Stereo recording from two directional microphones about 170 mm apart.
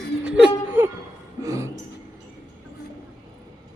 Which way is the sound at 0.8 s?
10° right (ahead or behind).